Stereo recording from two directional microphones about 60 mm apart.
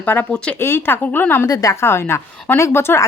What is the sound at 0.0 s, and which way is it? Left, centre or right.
Speech, left.